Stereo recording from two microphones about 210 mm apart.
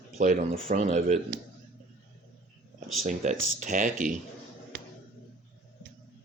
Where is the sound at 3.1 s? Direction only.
35° right (ahead or behind).